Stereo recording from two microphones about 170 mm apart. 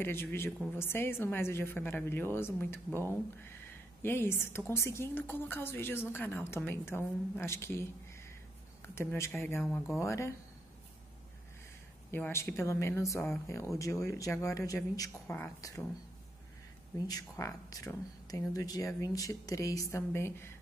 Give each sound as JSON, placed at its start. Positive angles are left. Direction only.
{"t": 0.0, "sound": "a woman's voice", "side_deg": 15}
{"t": 12.1, "sound": "a woman's voice", "side_deg": 15}
{"t": 17.1, "sound": "speech", "side_deg": 20}